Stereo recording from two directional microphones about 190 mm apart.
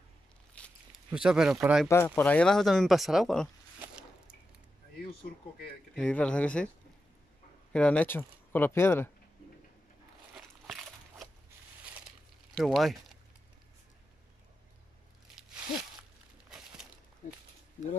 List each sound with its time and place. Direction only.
0.6 s a sound: centre (ahead or behind)
1.6 s speech: 5° right (ahead or behind)
1.9 s speech: 15° left (ahead or behind)
5.3 s speech: 55° left (ahead or behind)
5.9 s speech: 5° left (ahead or behind)
7.7 s speech: 5° left (ahead or behind)
10.3 s walk: centre (ahead or behind)
12.5 s speech: centre (ahead or behind)
16.4 s a sound: 5° right (ahead or behind)